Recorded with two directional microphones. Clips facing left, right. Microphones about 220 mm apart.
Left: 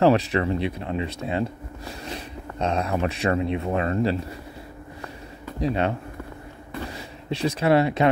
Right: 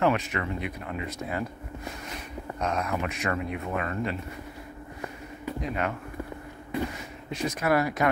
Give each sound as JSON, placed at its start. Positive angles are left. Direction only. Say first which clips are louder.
{"t": 0.0, "sound": "speech", "louder": "left 7 dB", "side_deg": 35}
{"t": 5.6, "sound": "speech", "louder": "left 7 dB", "side_deg": 30}
{"t": 7.2, "sound": "speech", "louder": "left 5 dB", "side_deg": 30}